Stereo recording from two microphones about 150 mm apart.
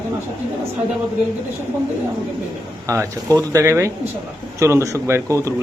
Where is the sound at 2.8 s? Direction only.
20° right (ahead or behind).